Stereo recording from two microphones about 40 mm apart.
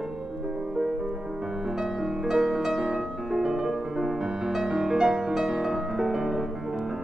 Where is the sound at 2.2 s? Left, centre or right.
Centre.